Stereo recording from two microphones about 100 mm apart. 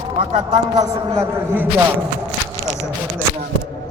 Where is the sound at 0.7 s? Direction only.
40° right (ahead or behind).